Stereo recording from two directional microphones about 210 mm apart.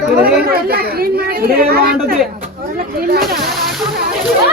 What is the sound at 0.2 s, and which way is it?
Speech, 45° right (ahead or behind).